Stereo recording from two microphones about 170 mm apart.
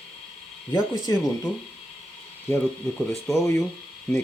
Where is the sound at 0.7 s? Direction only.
20° left (ahead or behind).